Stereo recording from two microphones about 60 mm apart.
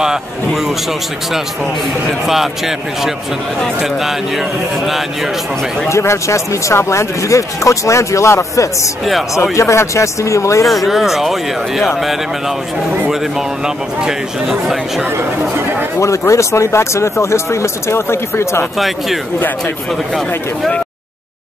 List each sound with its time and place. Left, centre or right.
2.2 s speech: centre
5.9 s speech: left
10.7 s speech: centre
14.0 s speech: centre
16.0 s speech: left